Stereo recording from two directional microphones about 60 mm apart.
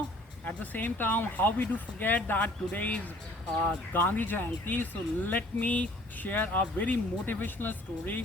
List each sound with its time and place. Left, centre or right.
0.4 s speech: left